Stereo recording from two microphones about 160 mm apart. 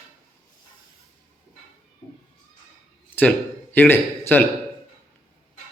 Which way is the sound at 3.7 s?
15° left (ahead or behind).